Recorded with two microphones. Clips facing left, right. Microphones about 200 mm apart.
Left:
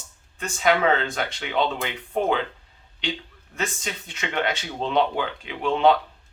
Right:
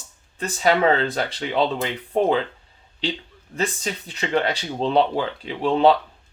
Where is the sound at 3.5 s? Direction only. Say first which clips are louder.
Right 4 dB; 35° right (ahead or behind).